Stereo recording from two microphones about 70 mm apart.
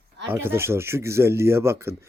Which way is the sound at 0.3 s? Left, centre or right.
Right.